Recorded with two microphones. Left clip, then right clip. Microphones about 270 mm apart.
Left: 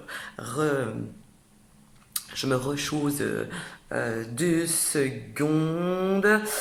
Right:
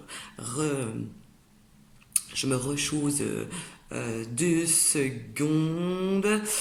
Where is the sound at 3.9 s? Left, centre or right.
Centre.